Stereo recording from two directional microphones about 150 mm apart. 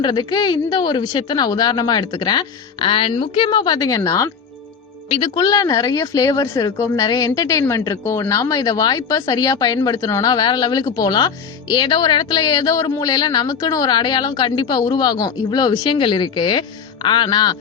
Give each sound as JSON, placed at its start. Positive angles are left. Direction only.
{"t": 0.0, "sound": "speech", "side_deg": 30}
{"t": 5.0, "sound": "speech", "side_deg": 35}